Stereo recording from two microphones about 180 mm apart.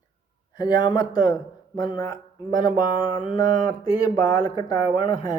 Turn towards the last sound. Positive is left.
turn(degrees=25)  # may be behind; listen again after turning